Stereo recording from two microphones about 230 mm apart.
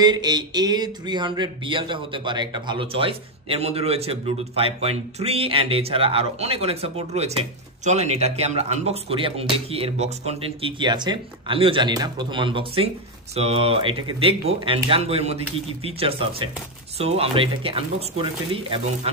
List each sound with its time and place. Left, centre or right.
0.0 s speech: centre